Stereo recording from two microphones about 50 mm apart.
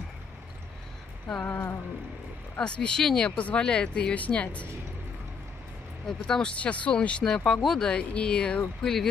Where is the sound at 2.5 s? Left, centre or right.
Left.